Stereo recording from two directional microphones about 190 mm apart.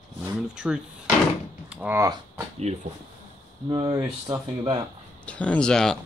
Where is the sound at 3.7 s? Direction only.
20° right (ahead or behind).